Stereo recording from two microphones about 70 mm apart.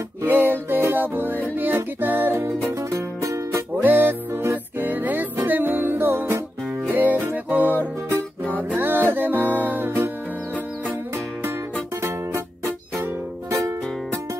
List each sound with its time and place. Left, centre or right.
0.2 s music: right
2.9 s music: right
3.8 s music: right
12.9 s music: right